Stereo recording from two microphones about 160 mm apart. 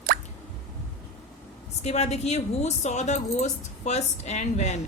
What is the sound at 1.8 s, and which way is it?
A woman's voice, 45° left (ahead or behind).